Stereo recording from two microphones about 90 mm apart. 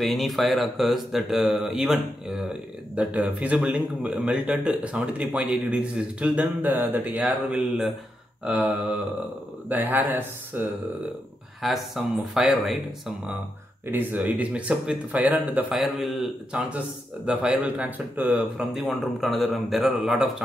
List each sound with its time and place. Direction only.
0.0 s speech: centre (ahead or behind); by 10.7 s 20° right (ahead or behind)
11.6 s speech: centre (ahead or behind)
13.9 s speech: 15° right (ahead or behind)
15.7 s speech: centre (ahead or behind)
17.3 s speech: 10° right (ahead or behind)
18.6 s speech: 5° right (ahead or behind)